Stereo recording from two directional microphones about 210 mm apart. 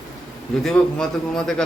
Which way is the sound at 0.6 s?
5° left (ahead or behind).